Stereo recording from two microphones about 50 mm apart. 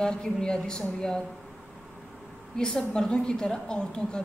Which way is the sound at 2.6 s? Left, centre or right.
Centre.